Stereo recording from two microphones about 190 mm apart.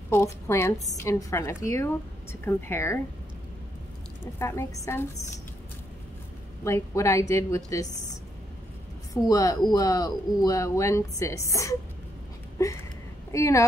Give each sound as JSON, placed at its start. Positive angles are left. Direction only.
{"t": 0.1, "sound": "speech", "side_deg": 15}
{"t": 4.4, "sound": "speech", "side_deg": 15}
{"t": 6.6, "sound": "speech", "side_deg": 15}
{"t": 9.1, "sound": "speech", "side_deg": 15}
{"t": 13.3, "sound": "speech", "side_deg": 15}